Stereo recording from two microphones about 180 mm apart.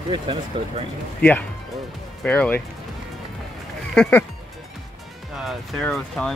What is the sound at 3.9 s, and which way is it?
Speech, 5° left (ahead or behind).